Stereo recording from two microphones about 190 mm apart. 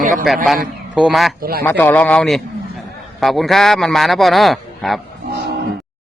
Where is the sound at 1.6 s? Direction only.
10° left (ahead or behind).